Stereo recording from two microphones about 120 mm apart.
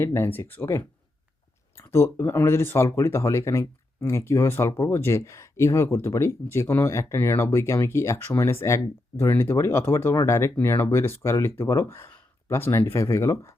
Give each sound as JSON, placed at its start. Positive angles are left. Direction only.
{"t": 0.0, "sound": "speech", "side_deg": 20}